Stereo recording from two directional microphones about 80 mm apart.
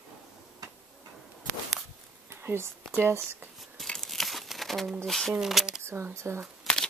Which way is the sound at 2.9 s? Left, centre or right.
Right.